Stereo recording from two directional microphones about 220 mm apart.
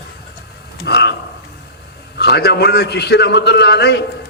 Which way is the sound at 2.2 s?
50° left (ahead or behind).